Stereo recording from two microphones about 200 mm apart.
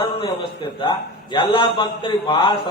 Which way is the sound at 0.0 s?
20° left (ahead or behind).